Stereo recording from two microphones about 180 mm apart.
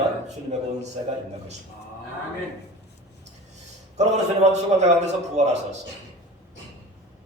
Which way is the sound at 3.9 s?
40° right (ahead or behind).